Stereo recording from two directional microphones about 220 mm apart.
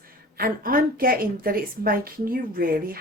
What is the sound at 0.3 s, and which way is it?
A woman's voice, 40° right (ahead or behind).